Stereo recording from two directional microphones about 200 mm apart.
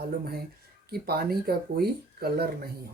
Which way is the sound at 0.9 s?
50° right (ahead or behind).